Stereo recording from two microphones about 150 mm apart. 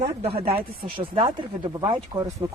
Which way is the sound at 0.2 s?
40° right (ahead or behind).